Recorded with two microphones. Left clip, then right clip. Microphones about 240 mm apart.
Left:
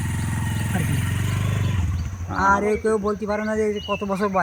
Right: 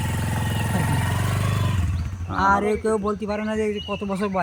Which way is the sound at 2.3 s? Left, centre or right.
Centre.